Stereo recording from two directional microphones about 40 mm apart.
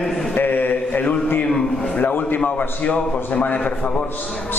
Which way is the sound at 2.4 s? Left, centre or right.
Left.